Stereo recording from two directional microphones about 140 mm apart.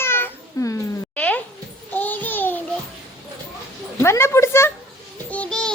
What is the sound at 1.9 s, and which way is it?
Babbling, 10° left (ahead or behind).